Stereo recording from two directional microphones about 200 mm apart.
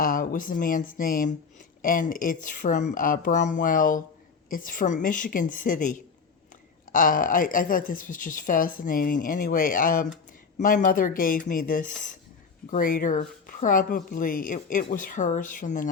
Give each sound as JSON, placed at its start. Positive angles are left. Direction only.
{"t": 0.0, "sound": "a woman's voice", "side_deg": 45}